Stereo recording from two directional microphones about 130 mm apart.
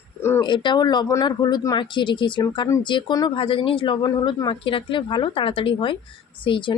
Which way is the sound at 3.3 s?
45° left (ahead or behind).